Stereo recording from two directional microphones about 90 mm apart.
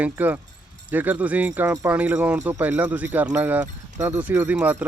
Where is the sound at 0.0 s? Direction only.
20° right (ahead or behind).